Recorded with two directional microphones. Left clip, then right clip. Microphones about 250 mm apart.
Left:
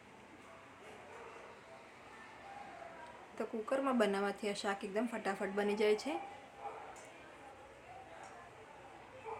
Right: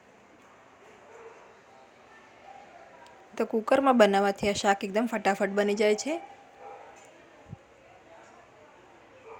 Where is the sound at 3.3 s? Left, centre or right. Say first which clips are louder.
Right 13 dB; right.